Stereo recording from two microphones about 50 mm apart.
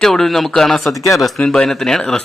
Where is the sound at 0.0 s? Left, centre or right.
Centre.